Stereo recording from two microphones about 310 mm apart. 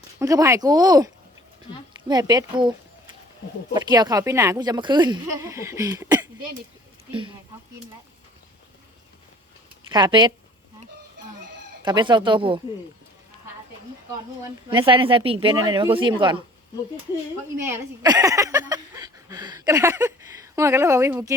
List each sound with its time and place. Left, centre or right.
0.2 s speech: centre
3.8 s speech: centre
9.9 s speech: centre
11.9 s speech: centre
14.7 s speech: centre
17.7 s speech: centre